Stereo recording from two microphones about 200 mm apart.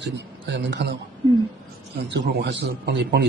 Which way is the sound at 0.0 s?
60° right (ahead or behind).